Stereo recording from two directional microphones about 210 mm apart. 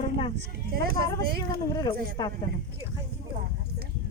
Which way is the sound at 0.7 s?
45° right (ahead or behind).